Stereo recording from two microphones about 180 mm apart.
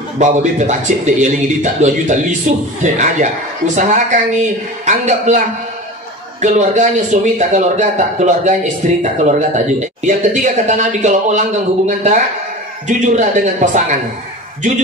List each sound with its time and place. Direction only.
0.2 s a man's voice: 40° right (ahead or behind)
6.4 s a man's voice: 40° right (ahead or behind)